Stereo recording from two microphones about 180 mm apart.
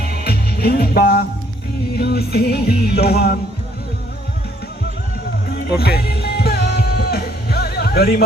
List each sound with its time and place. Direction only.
0.0 s music: 60° left (ahead or behind)
5.5 s music: 60° left (ahead or behind)